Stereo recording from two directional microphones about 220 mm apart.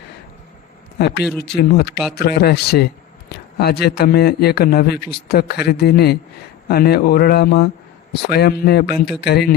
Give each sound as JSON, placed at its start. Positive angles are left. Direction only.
{"t": 1.4, "sound": "a man's voice", "side_deg": 45}
{"t": 8.9, "sound": "speech", "side_deg": 0}
{"t": 9.2, "sound": "a man's voice", "side_deg": 45}